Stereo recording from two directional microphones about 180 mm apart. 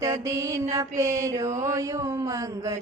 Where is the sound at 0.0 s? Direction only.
15° right (ahead or behind).